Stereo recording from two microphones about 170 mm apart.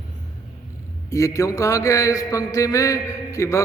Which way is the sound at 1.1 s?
20° left (ahead or behind).